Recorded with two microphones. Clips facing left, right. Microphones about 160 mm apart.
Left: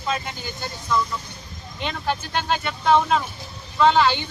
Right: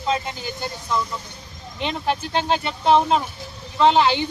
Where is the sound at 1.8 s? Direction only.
30° right (ahead or behind).